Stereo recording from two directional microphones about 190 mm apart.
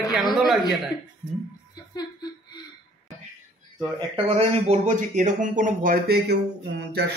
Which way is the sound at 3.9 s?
30° right (ahead or behind).